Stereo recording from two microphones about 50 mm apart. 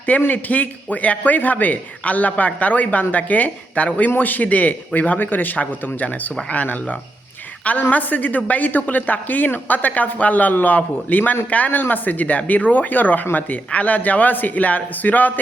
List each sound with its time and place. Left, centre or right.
0.3 s a man's voice: left